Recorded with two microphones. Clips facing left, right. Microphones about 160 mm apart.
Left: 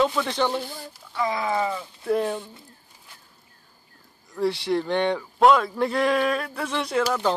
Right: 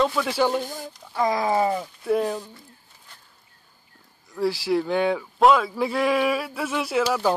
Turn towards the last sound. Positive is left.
turn(degrees=-5)  # may be behind; listen again after turning